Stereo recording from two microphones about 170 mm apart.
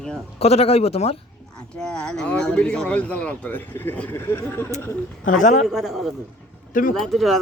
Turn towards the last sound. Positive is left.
turn(degrees=0)  # may be behind; listen again after turning